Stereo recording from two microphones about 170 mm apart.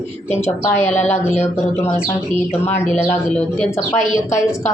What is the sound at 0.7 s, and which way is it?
Speech, 45° left (ahead or behind).